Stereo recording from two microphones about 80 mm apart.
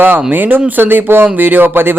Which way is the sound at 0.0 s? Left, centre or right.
Right.